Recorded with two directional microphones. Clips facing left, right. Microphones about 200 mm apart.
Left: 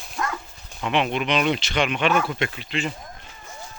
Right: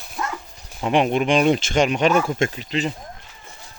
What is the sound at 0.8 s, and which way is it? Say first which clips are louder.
Speech: right 5 dB; 40° right (ahead or behind).